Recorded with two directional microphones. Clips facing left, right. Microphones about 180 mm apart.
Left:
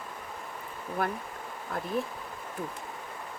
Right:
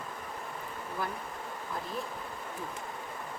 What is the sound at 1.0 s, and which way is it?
Speech, 60° left (ahead or behind).